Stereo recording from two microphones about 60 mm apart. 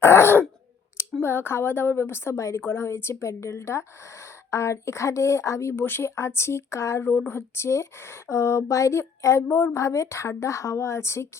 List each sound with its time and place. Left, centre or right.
0.0 s wail: left
1.2 s a woman's voice: left
2.6 s speech: left
5.7 s speech: left
7.0 s speech: left
9.5 s a woman's voice: left
9.7 s speech: left